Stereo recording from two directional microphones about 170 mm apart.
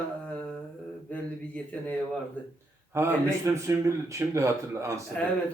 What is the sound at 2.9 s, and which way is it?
Speech, 15° right (ahead or behind).